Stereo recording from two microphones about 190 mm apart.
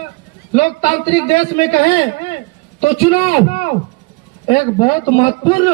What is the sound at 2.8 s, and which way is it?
A man's voice, 35° left (ahead or behind).